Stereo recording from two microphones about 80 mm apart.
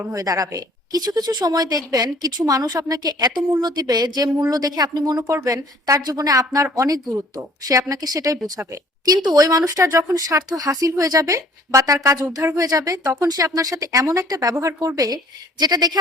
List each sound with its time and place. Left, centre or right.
0.1 s speech: right
5.3 s a woman's voice: right